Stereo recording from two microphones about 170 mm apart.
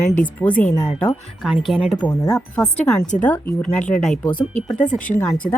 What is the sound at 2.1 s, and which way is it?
Speech, 20° left (ahead or behind).